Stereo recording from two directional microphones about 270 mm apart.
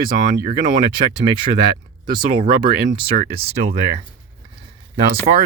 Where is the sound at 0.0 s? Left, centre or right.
Right.